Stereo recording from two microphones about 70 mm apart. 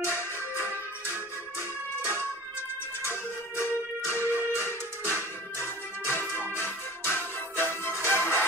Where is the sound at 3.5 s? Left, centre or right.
Left.